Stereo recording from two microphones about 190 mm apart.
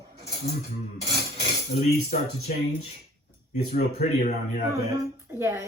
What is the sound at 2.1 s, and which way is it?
Speech, 40° left (ahead or behind).